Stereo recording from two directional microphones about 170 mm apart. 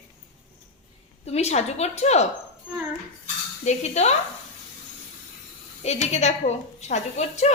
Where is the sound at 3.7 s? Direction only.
40° left (ahead or behind).